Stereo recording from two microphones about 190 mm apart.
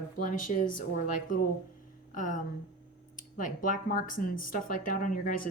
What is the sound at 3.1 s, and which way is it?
Speech, 45° left (ahead or behind).